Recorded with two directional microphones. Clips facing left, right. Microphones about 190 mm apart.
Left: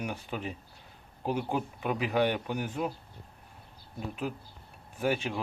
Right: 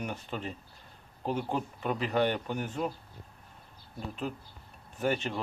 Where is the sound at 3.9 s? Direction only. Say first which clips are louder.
Left 1 dB; 10° left (ahead or behind).